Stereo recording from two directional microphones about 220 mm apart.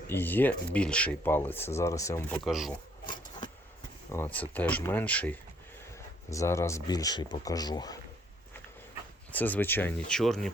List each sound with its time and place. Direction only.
0.1 s speech: 10° left (ahead or behind)
2.4 s speech: centre (ahead or behind)
3.1 s a sound: 20° left (ahead or behind)
4.1 s speech: 10° left (ahead or behind)
9.3 s speech: 10° left (ahead or behind)